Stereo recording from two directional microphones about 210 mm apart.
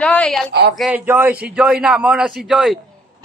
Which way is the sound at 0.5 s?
50° right (ahead or behind).